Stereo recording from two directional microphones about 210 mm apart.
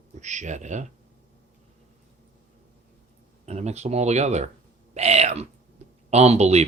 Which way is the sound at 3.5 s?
30° right (ahead or behind).